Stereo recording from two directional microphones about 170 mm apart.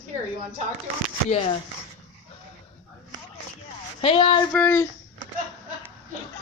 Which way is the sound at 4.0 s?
30° left (ahead or behind).